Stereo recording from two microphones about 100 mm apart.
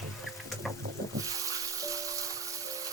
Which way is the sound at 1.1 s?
35° right (ahead or behind).